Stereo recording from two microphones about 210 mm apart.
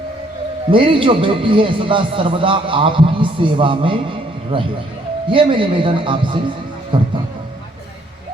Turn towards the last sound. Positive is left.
turn(degrees=-25)  # may be behind; listen again after turning